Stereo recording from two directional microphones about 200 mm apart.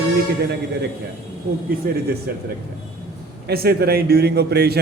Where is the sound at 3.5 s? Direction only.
50° right (ahead or behind).